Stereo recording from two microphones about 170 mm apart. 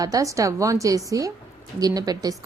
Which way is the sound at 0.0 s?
20° right (ahead or behind).